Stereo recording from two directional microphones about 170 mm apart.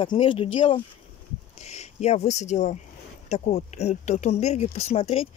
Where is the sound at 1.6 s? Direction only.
40° left (ahead or behind).